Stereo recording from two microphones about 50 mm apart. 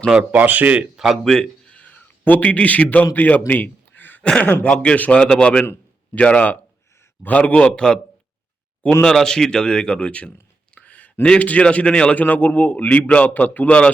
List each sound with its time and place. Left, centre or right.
0.3 s speech: right
0.9 s speech: centre
1.2 s a man's voice: centre
1.6 s a sound: left
2.0 s a man's voice: left
3.5 s a sound: left
4.2 s speech: left
5.2 s a man's voice: centre
9.0 s speech: centre
12.1 s a man's voice: left
13.7 s speech: left